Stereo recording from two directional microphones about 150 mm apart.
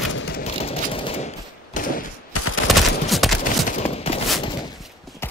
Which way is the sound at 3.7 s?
40° left (ahead or behind).